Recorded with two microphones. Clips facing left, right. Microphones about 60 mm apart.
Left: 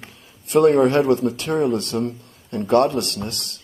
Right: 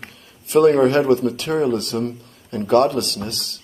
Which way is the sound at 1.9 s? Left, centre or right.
Centre.